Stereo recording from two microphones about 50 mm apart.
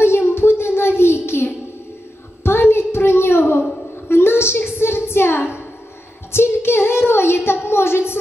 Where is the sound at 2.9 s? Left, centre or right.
Left.